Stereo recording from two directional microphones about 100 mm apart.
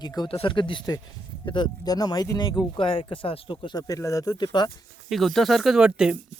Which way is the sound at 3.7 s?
35° left (ahead or behind).